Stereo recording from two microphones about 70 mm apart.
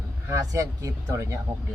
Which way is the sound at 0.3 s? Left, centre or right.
Right.